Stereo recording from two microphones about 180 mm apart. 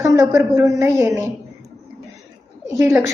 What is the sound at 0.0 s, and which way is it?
A woman's voice, 20° right (ahead or behind).